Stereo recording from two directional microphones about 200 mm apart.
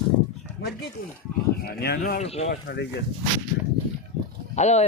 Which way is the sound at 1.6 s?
50° left (ahead or behind).